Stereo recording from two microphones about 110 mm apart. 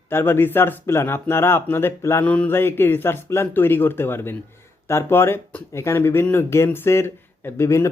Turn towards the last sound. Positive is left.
turn(degrees=25)  # may be behind; listen again after turning